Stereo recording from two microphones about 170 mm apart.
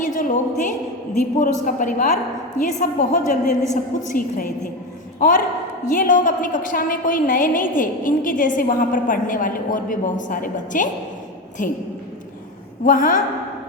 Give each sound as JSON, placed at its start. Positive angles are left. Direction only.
{"t": 0.0, "sound": "a woman's voice", "side_deg": 50}
{"t": 5.8, "sound": "a woman's voice", "side_deg": 50}
{"t": 12.8, "sound": "a woman's voice", "side_deg": 50}